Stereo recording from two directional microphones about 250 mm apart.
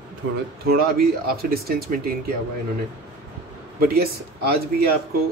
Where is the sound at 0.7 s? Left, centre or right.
Right.